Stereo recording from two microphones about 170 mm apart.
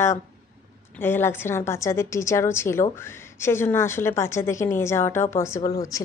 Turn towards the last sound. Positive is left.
turn(degrees=20)  # may be behind; listen again after turning